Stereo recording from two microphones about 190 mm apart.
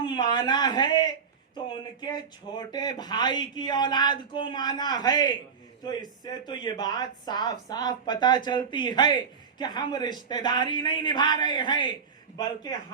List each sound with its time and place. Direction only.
0.0 s speech: 25° left (ahead or behind)